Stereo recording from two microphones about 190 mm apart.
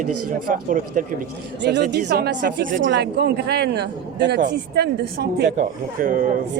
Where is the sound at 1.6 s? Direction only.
65° right (ahead or behind).